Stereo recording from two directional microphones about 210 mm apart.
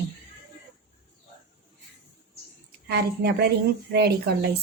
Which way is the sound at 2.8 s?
50° right (ahead or behind).